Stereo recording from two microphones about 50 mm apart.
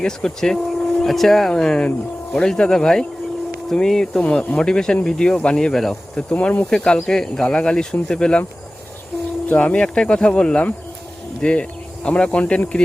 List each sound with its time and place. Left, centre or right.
0.0 s speech: centre
6.4 s speech: left
6.7 s speech: centre
9.6 s speech: left